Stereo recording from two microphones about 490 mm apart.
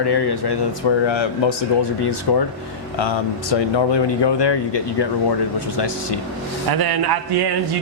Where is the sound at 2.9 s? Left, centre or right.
Left.